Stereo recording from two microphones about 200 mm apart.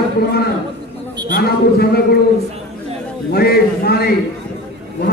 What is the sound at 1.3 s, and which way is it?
Speech, 50° left (ahead or behind).